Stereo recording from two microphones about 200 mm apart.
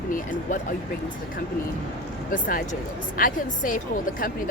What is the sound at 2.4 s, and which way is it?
A woman's voice, 40° left (ahead or behind).